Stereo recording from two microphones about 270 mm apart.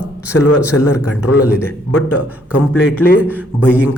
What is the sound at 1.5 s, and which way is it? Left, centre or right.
Speech, centre.